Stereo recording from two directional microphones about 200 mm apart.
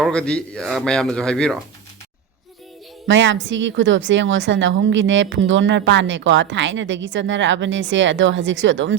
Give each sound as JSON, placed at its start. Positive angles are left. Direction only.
{"t": 0.0, "sound": "a man's voice", "side_deg": 5}
{"t": 3.1, "sound": "a woman's voice", "side_deg": -65}